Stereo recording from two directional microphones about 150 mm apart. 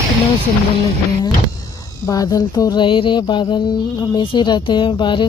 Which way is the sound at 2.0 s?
25° left (ahead or behind).